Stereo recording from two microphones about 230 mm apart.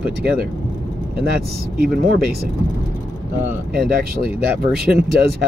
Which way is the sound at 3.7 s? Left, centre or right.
Right.